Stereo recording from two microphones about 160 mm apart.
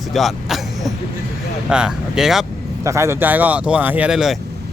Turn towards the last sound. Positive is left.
turn(degrees=-5)  # may be behind; listen again after turning